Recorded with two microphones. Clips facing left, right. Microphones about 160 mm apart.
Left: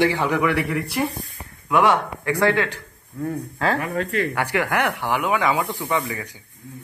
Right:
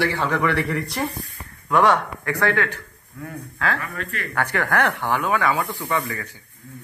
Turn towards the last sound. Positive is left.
turn(degrees=15)  # may be behind; listen again after turning